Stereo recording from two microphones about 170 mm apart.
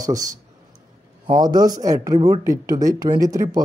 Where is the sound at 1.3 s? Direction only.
25° right (ahead or behind).